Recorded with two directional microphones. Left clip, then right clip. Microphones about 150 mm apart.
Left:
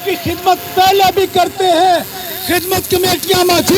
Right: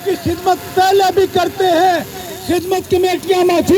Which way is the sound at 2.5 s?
30° right (ahead or behind).